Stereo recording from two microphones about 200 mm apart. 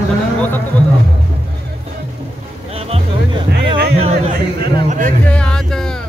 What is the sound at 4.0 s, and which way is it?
Music, 35° right (ahead or behind).